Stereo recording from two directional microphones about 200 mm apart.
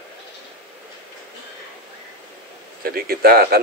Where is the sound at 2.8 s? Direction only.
50° right (ahead or behind).